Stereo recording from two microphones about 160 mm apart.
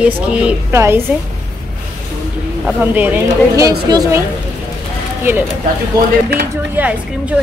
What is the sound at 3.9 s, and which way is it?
Speech, 25° right (ahead or behind).